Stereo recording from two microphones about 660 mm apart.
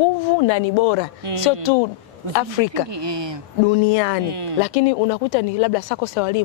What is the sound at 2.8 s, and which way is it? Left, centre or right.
Speech, right.